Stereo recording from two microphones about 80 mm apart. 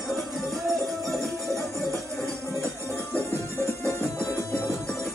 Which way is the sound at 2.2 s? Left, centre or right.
Right.